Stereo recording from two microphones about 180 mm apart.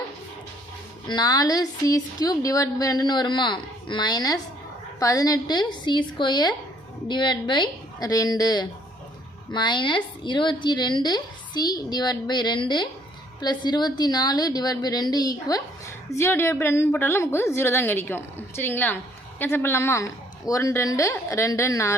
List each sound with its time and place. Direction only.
1.0 s a woman's voice: 25° left (ahead or behind)